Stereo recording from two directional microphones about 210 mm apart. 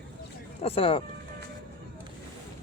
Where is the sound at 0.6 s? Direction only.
25° left (ahead or behind).